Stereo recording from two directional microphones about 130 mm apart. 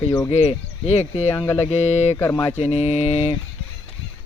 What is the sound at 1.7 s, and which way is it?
Speech, 55° left (ahead or behind).